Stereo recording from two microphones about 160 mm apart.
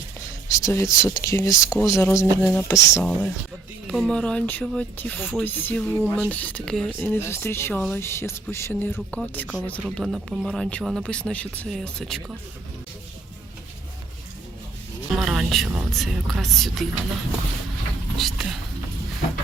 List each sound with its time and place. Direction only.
0.6 s speech: 20° left (ahead or behind)
3.0 s speech: 10° left (ahead or behind)
7.1 s speech: 15° left (ahead or behind)
15.1 s speech: centre (ahead or behind)
18.2 s speech: centre (ahead or behind)